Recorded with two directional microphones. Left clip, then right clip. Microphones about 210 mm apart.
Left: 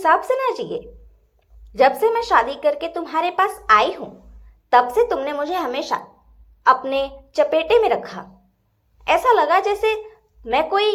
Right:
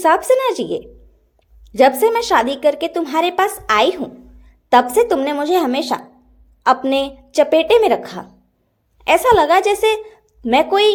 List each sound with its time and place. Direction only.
0.0 s a woman's voice: 50° right (ahead or behind)